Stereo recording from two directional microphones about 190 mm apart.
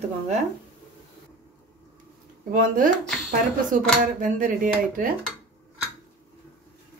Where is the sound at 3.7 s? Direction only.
45° right (ahead or behind).